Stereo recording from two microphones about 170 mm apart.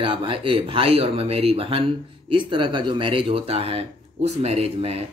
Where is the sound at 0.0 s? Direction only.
30° right (ahead or behind).